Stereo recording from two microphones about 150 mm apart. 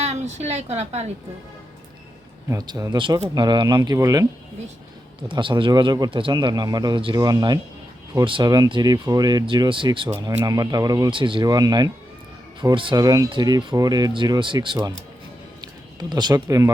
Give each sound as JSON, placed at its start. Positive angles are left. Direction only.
{"t": 0.0, "sound": "a woman's voice", "side_deg": -50}
{"t": 2.5, "sound": "speech", "side_deg": -25}
{"t": 5.3, "sound": "speech", "side_deg": -35}
{"t": 16.0, "sound": "speech", "side_deg": -30}